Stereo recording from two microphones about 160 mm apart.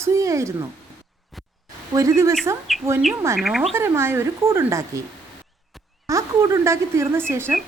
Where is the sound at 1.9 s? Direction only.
20° right (ahead or behind).